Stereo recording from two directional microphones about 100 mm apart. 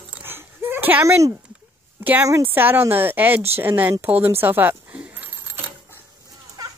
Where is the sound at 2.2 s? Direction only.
30° right (ahead or behind).